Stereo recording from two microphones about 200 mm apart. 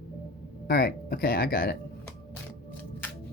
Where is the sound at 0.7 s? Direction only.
50° left (ahead or behind).